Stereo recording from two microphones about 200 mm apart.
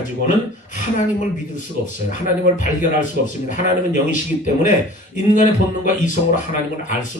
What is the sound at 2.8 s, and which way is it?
A man's voice, 40° left (ahead or behind).